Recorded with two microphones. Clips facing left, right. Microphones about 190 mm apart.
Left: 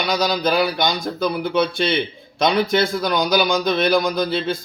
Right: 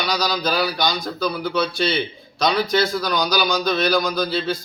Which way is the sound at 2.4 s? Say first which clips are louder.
Left 2 dB; 50° left (ahead or behind).